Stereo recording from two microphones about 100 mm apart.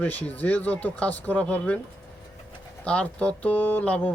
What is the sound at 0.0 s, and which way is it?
Speech, 15° left (ahead or behind).